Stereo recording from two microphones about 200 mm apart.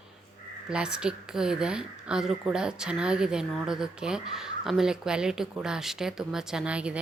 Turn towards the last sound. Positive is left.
turn(degrees=-5)  # may be behind; listen again after turning